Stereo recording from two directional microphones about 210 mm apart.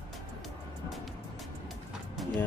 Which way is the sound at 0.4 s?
Centre (ahead or behind).